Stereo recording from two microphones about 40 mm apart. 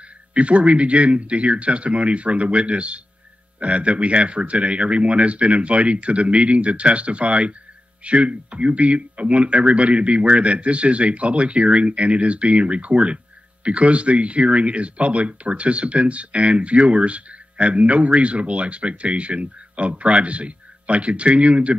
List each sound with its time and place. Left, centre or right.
0.3 s speech: right